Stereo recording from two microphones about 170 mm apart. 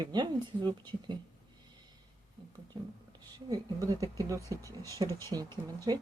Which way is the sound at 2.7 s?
25° right (ahead or behind).